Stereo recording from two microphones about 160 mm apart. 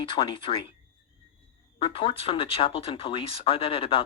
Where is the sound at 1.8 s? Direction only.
30° left (ahead or behind).